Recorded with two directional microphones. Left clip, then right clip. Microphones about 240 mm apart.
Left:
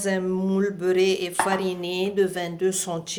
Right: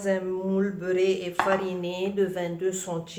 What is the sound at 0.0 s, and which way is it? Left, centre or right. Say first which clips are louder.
A woman's voice: left 2 dB; left.